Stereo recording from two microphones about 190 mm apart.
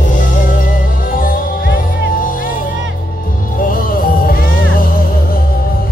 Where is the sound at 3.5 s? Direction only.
45° left (ahead or behind).